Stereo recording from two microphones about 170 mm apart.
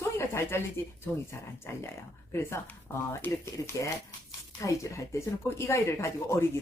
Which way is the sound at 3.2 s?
10° left (ahead or behind).